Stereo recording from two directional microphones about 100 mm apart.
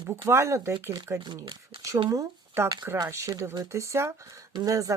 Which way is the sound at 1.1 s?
50° right (ahead or behind).